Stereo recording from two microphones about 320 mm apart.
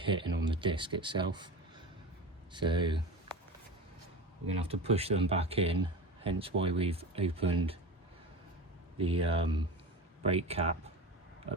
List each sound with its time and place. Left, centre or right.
0.0 s a man's voice: centre
2.5 s speech: centre
4.6 s a man's voice: centre
9.0 s a man's voice: centre